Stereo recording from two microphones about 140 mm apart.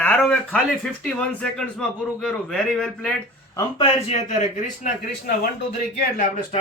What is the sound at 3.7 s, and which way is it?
A man's voice, 45° left (ahead or behind).